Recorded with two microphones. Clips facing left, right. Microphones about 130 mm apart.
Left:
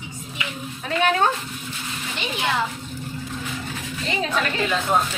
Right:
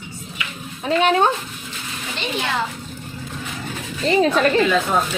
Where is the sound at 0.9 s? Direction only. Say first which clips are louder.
Right 4 dB; 25° right (ahead or behind).